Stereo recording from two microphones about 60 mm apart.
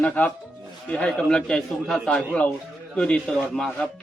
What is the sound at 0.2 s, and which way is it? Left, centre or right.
Speech, left.